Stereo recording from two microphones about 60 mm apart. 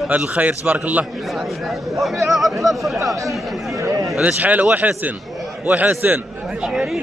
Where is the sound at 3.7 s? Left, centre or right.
Right.